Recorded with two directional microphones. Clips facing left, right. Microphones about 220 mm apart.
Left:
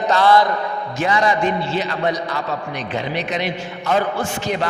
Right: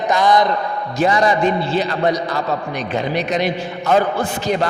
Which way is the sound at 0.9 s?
35° right (ahead or behind).